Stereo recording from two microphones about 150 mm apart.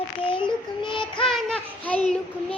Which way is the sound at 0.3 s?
35° left (ahead or behind).